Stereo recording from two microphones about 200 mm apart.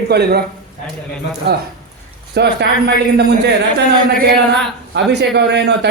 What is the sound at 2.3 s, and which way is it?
Speech, 55° right (ahead or behind).